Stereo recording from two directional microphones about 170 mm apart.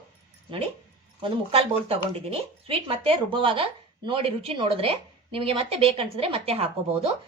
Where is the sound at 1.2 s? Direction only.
35° right (ahead or behind).